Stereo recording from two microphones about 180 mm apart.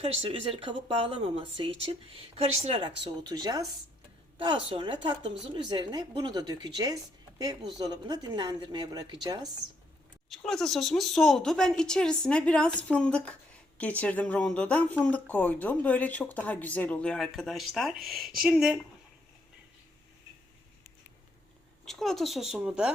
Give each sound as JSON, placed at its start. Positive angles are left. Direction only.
{"t": 0.0, "sound": "speech", "side_deg": -35}
{"t": 3.2, "sound": "speech", "side_deg": -20}
{"t": 10.2, "sound": "speech", "side_deg": 0}
{"t": 21.8, "sound": "speech", "side_deg": 0}